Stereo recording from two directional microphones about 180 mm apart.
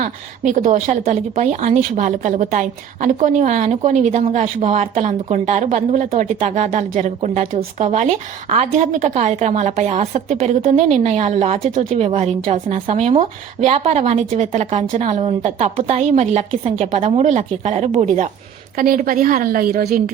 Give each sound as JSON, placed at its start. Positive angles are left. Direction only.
{"t": 0.0, "sound": "a woman's voice", "side_deg": -40}
{"t": 18.8, "sound": "a woman's voice", "side_deg": -50}